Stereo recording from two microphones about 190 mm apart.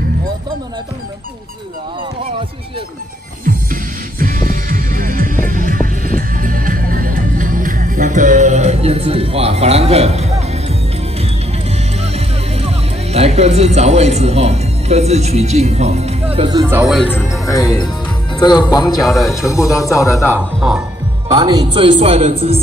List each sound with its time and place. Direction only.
3.4 s music: 45° right (ahead or behind)
12.0 s speech: 35° right (ahead or behind)
16.6 s speech: 10° right (ahead or behind)
17.1 s speech: 15° left (ahead or behind)
18.9 s speech: centre (ahead or behind)
19.4 s speech: 15° left (ahead or behind)
20.3 s speech: centre (ahead or behind)
21.3 s speech: 20° right (ahead or behind)